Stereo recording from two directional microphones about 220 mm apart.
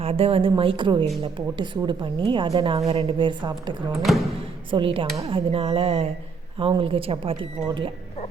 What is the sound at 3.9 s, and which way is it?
Speech, centre (ahead or behind).